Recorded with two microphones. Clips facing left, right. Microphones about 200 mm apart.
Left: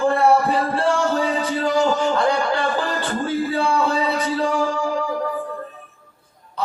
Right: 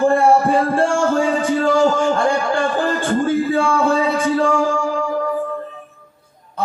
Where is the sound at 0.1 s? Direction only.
50° right (ahead or behind).